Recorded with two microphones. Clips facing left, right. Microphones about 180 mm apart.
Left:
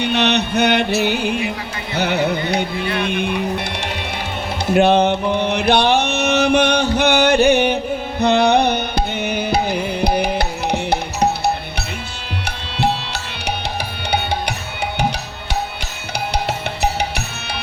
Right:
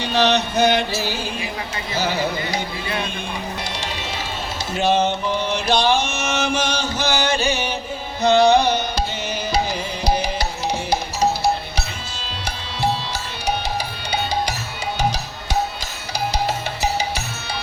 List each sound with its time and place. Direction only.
0.0 s music: 65° left (ahead or behind)
3.0 s speech: 65° left (ahead or behind)
4.7 s music: 60° left (ahead or behind)
5.4 s chant: 60° left (ahead or behind)
8.2 s music: 60° left (ahead or behind)
12.5 s music: 65° left (ahead or behind)
16.3 s music: 65° left (ahead or behind)